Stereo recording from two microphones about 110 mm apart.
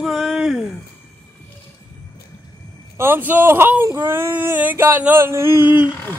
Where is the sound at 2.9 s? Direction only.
20° right (ahead or behind).